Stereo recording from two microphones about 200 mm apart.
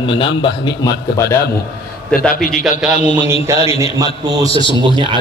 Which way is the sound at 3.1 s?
10° right (ahead or behind).